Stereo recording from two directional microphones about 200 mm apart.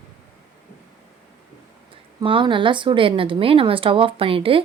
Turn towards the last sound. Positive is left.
turn(degrees=-25)  # may be behind; listen again after turning